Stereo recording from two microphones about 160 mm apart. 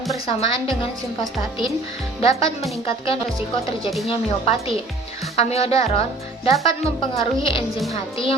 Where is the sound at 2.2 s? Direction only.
35° left (ahead or behind).